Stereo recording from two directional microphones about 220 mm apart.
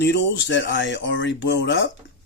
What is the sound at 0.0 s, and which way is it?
Speech, 55° left (ahead or behind).